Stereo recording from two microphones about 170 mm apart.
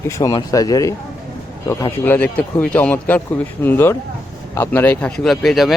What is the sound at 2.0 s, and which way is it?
A man's voice, 10° left (ahead or behind).